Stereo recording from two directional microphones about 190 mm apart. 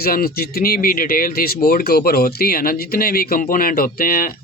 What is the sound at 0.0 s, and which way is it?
Speech, 50° left (ahead or behind).